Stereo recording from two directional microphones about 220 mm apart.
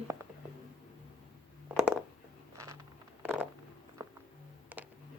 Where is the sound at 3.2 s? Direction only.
10° right (ahead or behind).